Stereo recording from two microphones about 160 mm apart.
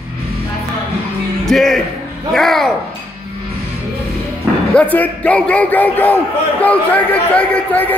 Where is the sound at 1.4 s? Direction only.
Centre (ahead or behind).